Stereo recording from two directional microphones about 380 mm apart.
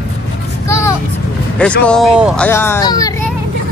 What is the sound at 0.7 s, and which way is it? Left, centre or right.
Vehicle, centre.